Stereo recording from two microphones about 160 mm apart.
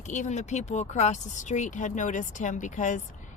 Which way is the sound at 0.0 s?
50° left (ahead or behind).